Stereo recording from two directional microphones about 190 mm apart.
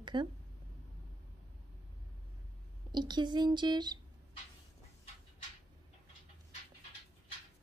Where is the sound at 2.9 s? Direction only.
25° right (ahead or behind).